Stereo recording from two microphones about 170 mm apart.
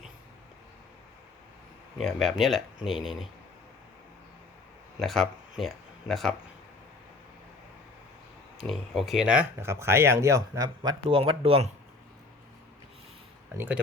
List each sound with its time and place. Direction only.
2.0 s speech: centre (ahead or behind)
4.9 s speech: centre (ahead or behind)
8.5 s speech: centre (ahead or behind); by 10.9 s 20° right (ahead or behind)
11.1 s speech: 30° right (ahead or behind)
13.6 s speech: 10° right (ahead or behind)